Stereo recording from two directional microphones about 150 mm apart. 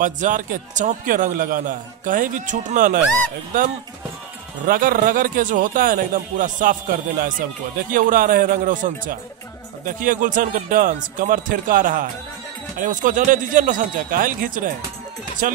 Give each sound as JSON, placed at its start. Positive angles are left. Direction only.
{"t": 0.0, "sound": "a man's voice", "side_deg": -60}
{"t": 4.6, "sound": "a man's voice", "side_deg": -70}